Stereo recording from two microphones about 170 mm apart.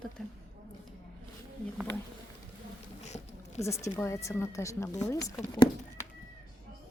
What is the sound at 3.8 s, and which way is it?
A woman's voice, 15° left (ahead or behind).